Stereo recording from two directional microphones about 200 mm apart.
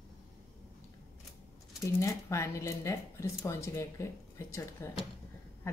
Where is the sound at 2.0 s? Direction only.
15° left (ahead or behind).